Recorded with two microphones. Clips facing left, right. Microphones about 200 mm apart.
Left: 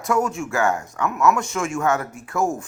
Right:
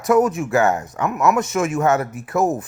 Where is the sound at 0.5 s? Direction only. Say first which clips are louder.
Right 3 dB; 20° right (ahead or behind).